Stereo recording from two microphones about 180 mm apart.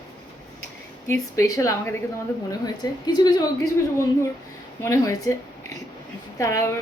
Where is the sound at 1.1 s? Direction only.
15° left (ahead or behind).